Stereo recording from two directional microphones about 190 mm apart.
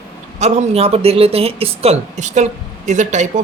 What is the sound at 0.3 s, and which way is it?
Speech, 35° right (ahead or behind).